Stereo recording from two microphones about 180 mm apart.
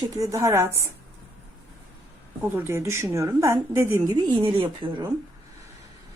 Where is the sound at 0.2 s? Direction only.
15° right (ahead or behind).